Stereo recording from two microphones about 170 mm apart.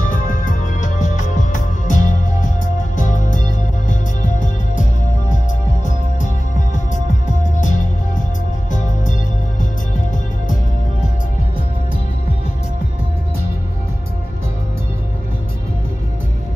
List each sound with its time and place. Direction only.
0.0 s music: 50° left (ahead or behind)
5.9 s music: 45° left (ahead or behind)